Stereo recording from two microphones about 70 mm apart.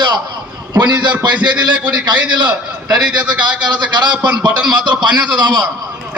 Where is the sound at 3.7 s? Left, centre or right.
Right.